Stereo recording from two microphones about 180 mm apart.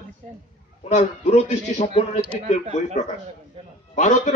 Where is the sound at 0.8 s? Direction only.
40° left (ahead or behind).